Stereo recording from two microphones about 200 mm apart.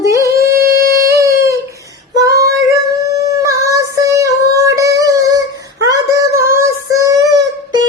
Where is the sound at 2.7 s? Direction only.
15° right (ahead or behind).